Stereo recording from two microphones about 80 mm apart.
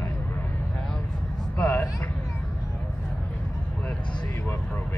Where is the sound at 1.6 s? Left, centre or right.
Centre.